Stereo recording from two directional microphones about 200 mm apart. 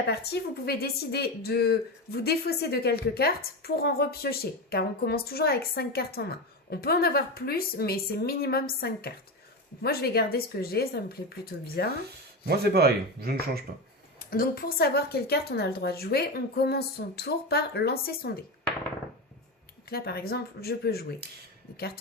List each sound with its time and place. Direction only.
0.1 s a woman's voice: 55° left (ahead or behind)
12.5 s speech: 55° right (ahead or behind)
14.3 s a woman's voice: 45° left (ahead or behind)
19.9 s a woman's voice: 50° left (ahead or behind)